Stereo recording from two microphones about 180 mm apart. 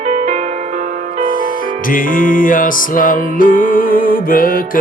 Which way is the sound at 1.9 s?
50° left (ahead or behind).